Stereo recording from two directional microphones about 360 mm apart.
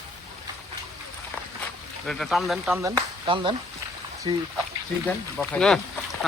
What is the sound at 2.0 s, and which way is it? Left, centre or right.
Speech, centre.